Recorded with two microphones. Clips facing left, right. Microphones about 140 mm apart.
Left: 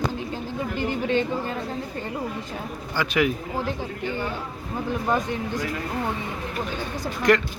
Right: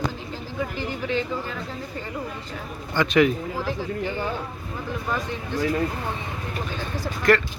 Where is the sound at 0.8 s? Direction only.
55° left (ahead or behind).